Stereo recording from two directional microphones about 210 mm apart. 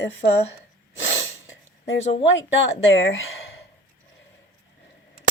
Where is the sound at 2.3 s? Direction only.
60° left (ahead or behind).